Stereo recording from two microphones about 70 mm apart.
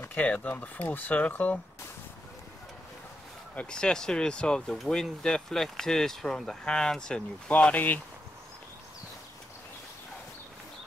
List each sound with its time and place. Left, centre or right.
0.1 s speech: left
3.5 s speech: centre